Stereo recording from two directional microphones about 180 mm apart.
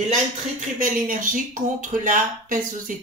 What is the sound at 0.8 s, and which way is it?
Speech, 50° right (ahead or behind).